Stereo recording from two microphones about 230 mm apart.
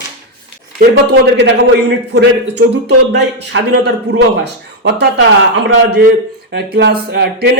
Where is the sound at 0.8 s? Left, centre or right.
Right.